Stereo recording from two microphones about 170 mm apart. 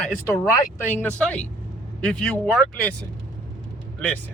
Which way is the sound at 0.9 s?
5° left (ahead or behind).